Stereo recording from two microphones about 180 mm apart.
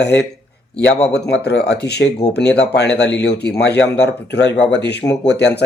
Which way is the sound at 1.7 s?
65° left (ahead or behind).